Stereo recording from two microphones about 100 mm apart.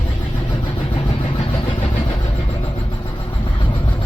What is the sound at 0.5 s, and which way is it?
Vehicle, 60° left (ahead or behind).